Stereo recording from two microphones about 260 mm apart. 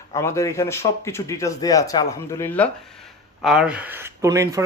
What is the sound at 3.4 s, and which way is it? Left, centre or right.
Speech, centre.